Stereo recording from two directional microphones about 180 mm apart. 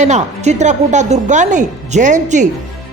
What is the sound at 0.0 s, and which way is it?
Speech, 40° right (ahead or behind).